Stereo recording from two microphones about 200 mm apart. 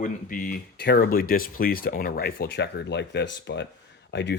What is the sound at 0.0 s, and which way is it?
Speech, 45° left (ahead or behind).